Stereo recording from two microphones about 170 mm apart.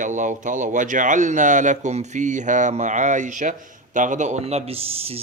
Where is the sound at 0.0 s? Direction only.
50° right (ahead or behind).